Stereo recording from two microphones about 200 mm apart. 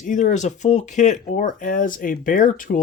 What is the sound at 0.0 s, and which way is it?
Speech, 40° left (ahead or behind).